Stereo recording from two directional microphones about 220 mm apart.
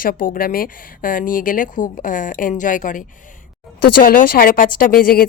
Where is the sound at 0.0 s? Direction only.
40° left (ahead or behind).